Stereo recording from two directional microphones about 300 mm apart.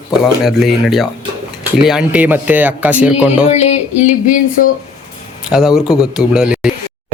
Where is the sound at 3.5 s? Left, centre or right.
Left.